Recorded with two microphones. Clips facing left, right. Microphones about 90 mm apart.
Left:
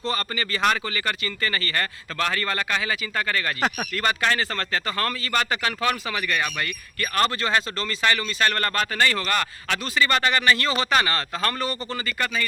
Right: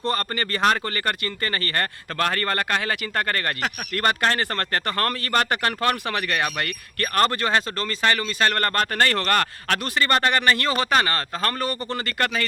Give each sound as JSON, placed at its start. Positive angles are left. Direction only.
{"t": 0.0, "sound": "speech", "side_deg": -55}
{"t": 7.5, "sound": "speech", "side_deg": -35}
{"t": 8.5, "sound": "speech", "side_deg": -45}